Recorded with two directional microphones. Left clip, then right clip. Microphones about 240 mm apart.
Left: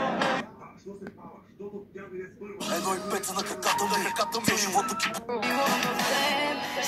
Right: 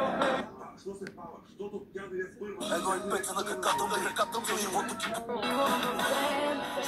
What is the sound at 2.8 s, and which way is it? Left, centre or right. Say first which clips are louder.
Music: left 2 dB; left.